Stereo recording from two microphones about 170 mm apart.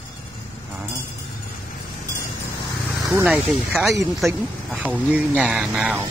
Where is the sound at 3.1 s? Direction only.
10° right (ahead or behind).